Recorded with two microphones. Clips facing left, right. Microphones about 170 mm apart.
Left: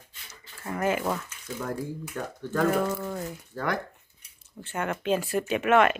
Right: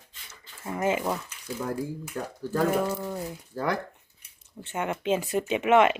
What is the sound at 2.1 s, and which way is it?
Speech, 35° right (ahead or behind).